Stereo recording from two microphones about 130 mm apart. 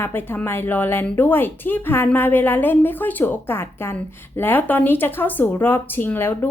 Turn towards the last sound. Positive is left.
turn(degrees=15)  # may be behind; listen again after turning